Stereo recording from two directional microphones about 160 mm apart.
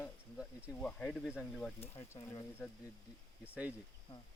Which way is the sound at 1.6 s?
15° left (ahead or behind).